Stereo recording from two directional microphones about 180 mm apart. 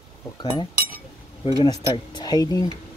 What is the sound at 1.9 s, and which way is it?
Speech, 20° left (ahead or behind).